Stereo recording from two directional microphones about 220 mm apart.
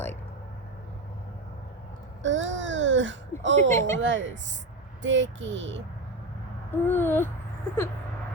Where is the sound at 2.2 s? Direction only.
60° right (ahead or behind).